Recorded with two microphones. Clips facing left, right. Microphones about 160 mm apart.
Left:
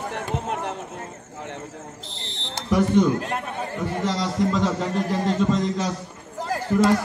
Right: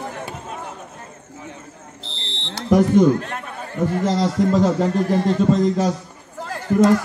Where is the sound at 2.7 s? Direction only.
45° right (ahead or behind).